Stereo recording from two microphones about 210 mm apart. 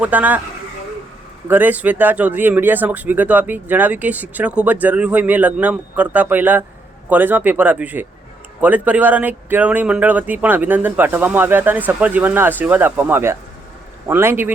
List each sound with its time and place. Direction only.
0.0 s speech: 10° right (ahead or behind)
1.5 s speech: 10° right (ahead or behind)